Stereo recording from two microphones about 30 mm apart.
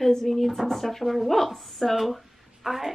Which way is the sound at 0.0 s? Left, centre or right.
Centre.